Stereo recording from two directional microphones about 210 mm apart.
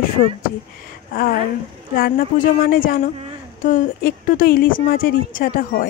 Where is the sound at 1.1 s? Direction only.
45° left (ahead or behind).